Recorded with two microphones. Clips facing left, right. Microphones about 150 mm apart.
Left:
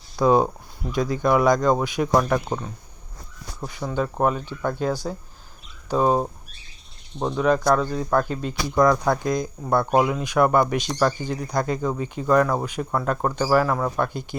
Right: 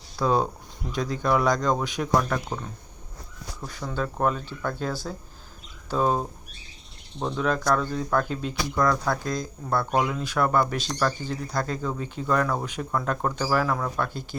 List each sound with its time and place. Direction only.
0.2 s speech: 15° left (ahead or behind)
3.7 s speech: 10° left (ahead or behind)
7.2 s speech: 10° left (ahead or behind)
8.7 s speech: 20° left (ahead or behind)
14.1 s speech: 55° left (ahead or behind)